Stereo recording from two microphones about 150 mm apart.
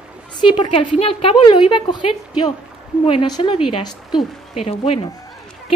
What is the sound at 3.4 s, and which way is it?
Speech, 30° left (ahead or behind).